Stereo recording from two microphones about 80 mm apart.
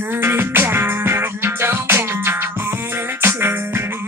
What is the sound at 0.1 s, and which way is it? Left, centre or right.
Music, right.